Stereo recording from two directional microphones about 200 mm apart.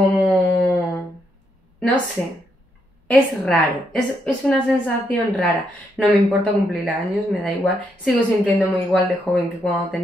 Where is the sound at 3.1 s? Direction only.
5° left (ahead or behind).